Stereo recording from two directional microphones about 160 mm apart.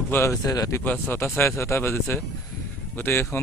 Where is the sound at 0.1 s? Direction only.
20° left (ahead or behind).